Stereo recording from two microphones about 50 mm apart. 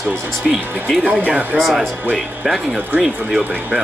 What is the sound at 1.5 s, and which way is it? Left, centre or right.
Speech, centre.